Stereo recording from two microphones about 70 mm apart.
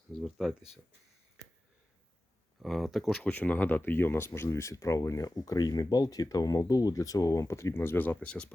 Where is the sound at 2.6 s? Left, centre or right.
Centre.